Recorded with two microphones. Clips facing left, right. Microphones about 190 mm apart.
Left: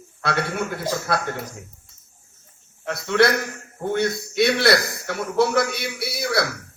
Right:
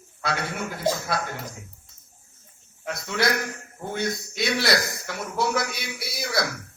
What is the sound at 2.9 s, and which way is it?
A man's voice, 60° left (ahead or behind).